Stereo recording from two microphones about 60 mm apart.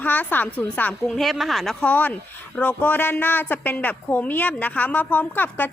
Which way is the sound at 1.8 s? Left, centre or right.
Left.